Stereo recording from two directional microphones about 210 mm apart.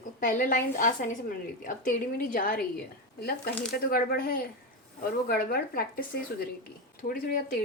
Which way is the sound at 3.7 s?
45° left (ahead or behind).